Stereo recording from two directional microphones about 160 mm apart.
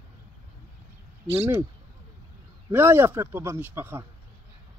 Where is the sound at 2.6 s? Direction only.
15° right (ahead or behind).